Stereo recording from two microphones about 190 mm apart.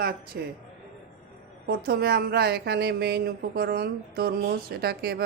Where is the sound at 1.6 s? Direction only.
55° right (ahead or behind).